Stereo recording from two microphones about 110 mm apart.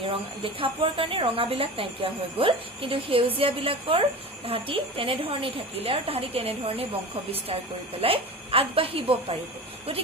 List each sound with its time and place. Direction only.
0.0 s a woman's voice: 55° right (ahead or behind)
8.0 s a woman's voice: 60° right (ahead or behind)